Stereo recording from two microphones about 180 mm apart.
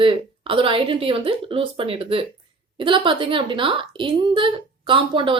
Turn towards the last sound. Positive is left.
turn(degrees=-25)  # may be behind; listen again after turning